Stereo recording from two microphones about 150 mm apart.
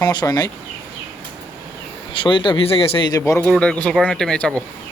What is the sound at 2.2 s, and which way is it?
Speech, 35° left (ahead or behind).